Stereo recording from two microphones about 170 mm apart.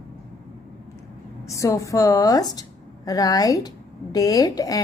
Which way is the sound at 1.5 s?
20° left (ahead or behind).